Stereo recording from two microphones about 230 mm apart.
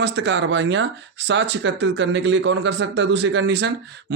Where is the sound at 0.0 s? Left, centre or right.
Right.